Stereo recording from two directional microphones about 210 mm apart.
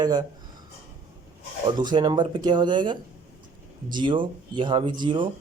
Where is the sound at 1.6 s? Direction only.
20° right (ahead or behind).